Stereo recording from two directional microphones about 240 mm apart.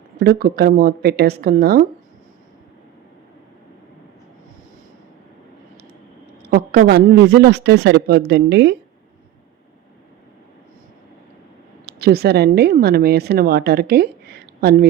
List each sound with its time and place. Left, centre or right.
0.2 s speech: right
6.5 s speech: right
11.9 s a woman's voice: right